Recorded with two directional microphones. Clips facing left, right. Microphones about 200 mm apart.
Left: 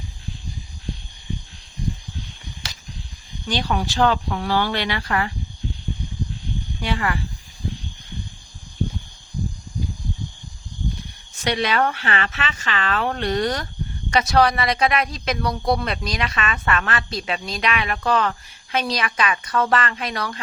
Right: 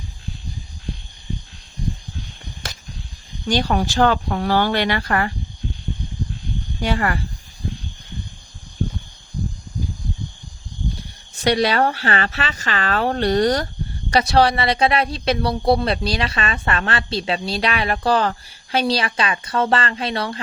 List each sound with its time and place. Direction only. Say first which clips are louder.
2.6 s a sound: right 6 dB; 55° right (ahead or behind)
3.4 s speech: right 4 dB; 45° right (ahead or behind)
6.7 s speech: right 4 dB; 45° right (ahead or behind)
11.3 s speech: right 4 dB; 35° right (ahead or behind)